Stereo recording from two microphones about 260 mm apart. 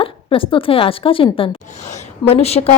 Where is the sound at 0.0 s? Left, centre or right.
Centre.